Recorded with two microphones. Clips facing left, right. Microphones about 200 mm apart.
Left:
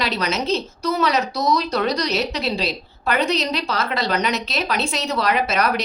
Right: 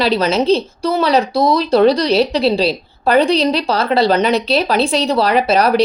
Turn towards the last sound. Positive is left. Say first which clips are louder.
# right 8 dB
turn(degrees=-30)  # may be behind; listen again after turning